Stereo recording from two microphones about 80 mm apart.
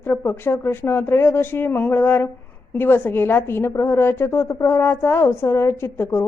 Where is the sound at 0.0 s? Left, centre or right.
Left.